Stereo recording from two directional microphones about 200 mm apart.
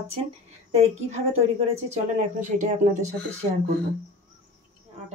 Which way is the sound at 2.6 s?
35° right (ahead or behind).